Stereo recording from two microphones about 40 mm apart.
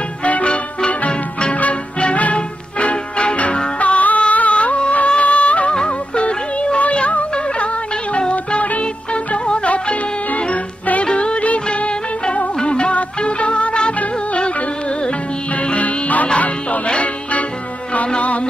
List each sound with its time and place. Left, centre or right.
0.2 s music: left